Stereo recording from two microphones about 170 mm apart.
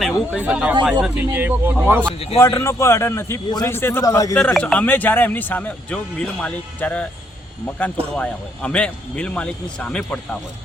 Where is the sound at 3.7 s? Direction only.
15° left (ahead or behind).